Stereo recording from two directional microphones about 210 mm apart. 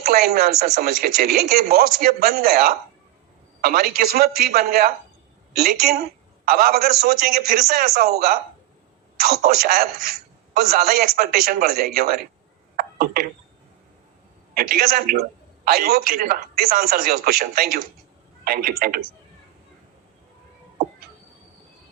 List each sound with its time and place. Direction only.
0.0 s a man's voice: 45° right (ahead or behind)
12.7 s a sound: 45° right (ahead or behind)
14.5 s a man's voice: 45° right (ahead or behind)